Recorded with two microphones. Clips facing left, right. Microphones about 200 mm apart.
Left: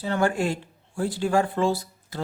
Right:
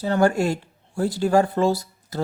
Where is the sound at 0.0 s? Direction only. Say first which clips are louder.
Right 4 dB; 40° right (ahead or behind).